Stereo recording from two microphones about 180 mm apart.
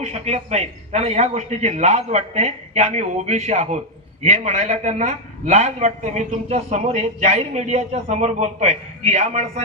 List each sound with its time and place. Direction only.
0.0 s a man's voice: 35° right (ahead or behind)